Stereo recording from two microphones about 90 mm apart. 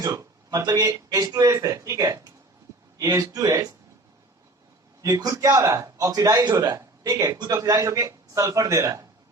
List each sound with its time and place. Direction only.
0.0 s a man's voice: 35° right (ahead or behind)
5.0 s a man's voice: 35° right (ahead or behind)